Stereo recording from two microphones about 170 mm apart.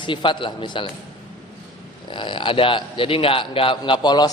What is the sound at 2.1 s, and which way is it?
A man's voice, 30° left (ahead or behind).